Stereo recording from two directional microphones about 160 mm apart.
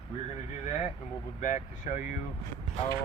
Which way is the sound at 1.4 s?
50° left (ahead or behind).